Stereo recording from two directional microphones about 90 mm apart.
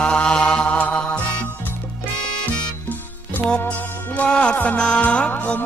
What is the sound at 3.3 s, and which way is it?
Music, 15° left (ahead or behind).